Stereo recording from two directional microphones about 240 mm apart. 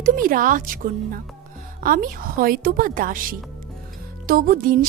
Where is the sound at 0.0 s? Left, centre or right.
Right.